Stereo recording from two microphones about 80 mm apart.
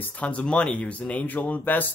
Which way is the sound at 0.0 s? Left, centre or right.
Centre.